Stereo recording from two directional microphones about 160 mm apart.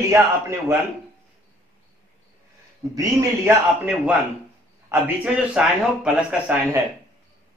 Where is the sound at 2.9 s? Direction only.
10° right (ahead or behind).